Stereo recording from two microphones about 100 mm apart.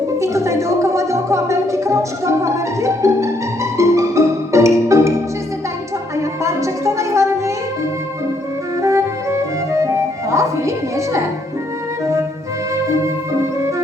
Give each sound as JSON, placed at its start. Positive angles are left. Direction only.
{"t": 0.2, "sound": "music", "side_deg": -30}
{"t": 6.1, "sound": "music", "side_deg": -30}
{"t": 8.8, "sound": "music", "side_deg": -30}